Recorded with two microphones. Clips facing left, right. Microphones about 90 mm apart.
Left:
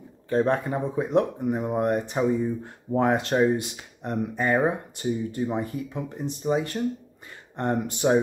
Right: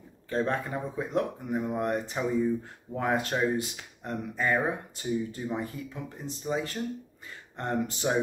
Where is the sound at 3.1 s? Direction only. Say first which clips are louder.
Left 4 dB; 20° left (ahead or behind).